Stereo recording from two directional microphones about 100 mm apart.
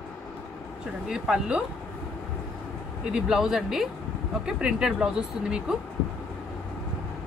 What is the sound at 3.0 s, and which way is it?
Speech, 5° right (ahead or behind).